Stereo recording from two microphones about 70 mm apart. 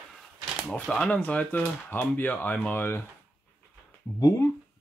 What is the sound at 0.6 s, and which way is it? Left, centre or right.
Speech, centre.